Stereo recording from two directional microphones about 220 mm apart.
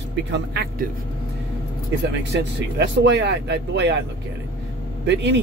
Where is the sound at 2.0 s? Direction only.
50° right (ahead or behind).